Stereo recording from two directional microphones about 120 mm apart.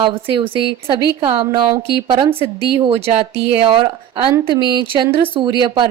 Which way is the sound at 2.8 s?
55° right (ahead or behind).